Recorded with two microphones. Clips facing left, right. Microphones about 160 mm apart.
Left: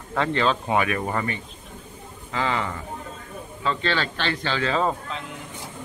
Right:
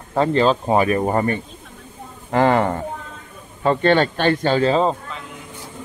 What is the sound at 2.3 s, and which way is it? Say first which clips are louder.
Speech: right 10 dB; 55° right (ahead or behind).